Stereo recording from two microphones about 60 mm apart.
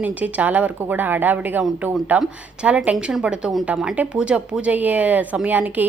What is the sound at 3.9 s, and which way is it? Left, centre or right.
A woman's voice, right.